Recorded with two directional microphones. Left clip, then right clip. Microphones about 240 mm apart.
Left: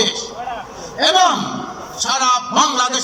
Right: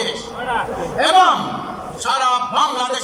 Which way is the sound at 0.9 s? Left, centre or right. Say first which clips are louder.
Right 1 dB; left.